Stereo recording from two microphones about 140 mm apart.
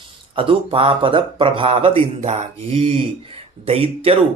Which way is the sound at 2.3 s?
50° right (ahead or behind).